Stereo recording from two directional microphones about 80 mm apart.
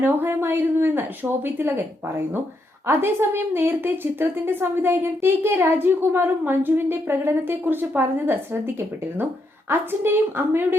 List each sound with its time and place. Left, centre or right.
0.0 s a woman's voice: right